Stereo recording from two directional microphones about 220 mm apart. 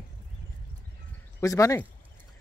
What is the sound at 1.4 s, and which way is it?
Speech, 15° left (ahead or behind).